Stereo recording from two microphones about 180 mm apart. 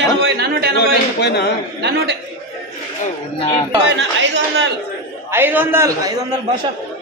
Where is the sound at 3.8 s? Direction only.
90° right.